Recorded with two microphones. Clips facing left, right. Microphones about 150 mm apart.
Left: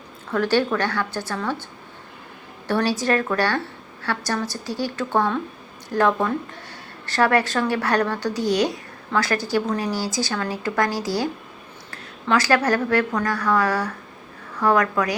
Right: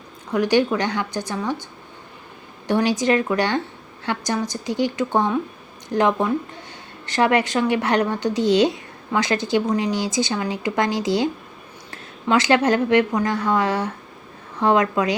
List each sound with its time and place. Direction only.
0.3 s a woman's voice: 15° right (ahead or behind)
2.6 s a woman's voice: 20° right (ahead or behind)